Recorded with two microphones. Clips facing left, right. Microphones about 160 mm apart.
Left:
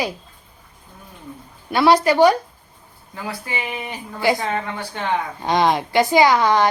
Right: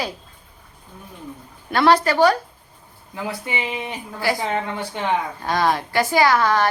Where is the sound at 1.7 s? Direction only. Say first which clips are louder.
Left 1 dB; 10° left (ahead or behind).